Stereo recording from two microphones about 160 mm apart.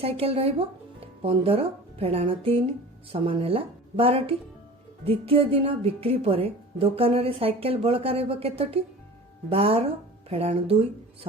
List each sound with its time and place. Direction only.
0.0 s a woman's voice: 40° right (ahead or behind)